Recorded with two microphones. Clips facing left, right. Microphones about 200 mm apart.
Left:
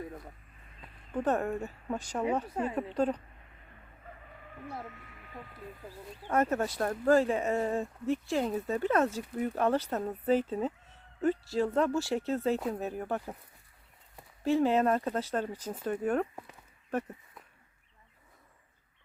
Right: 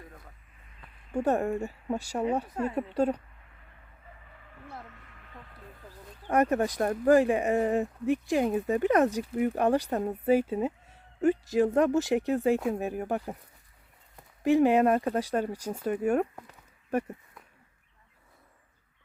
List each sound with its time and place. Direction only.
1.1 s speech: 10° right (ahead or behind)
2.5 s a woman's voice: 10° left (ahead or behind)
2.7 s speech: 10° right (ahead or behind)
5.1 s a sound: 15° left (ahead or behind)
6.2 s speech: 15° right (ahead or behind)
14.4 s speech: 15° right (ahead or behind)